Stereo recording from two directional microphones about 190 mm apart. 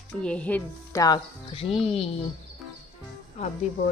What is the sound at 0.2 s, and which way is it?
Speech, 5° left (ahead or behind).